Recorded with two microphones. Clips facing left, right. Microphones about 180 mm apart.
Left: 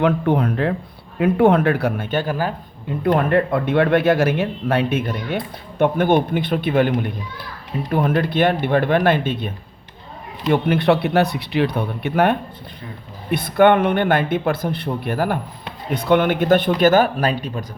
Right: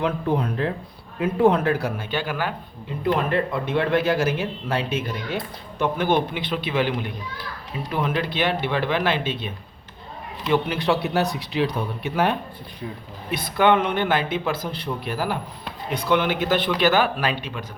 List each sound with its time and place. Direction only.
0.0 s speech: 60° left (ahead or behind); by 2.5 s 40° left (ahead or behind)
3.0 s speech: 55° left (ahead or behind)
10.5 s speech: 55° left (ahead or behind); by 17.7 s 40° left (ahead or behind)